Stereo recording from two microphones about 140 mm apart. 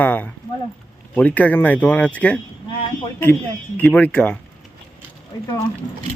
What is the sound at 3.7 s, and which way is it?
Speech, 10° left (ahead or behind).